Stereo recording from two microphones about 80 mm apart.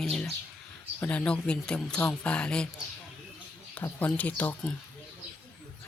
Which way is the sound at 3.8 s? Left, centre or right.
Centre.